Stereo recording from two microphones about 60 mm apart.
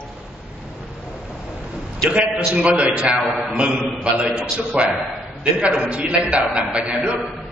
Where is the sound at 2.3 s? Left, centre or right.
Centre.